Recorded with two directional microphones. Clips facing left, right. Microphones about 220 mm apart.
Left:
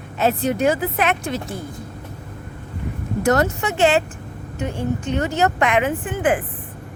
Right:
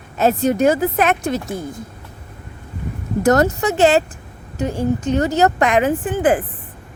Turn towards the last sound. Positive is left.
turn(degrees=-35)  # may be behind; listen again after turning